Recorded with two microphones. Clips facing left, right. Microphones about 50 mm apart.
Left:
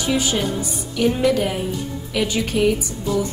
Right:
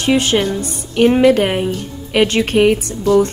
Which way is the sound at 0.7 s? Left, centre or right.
Right.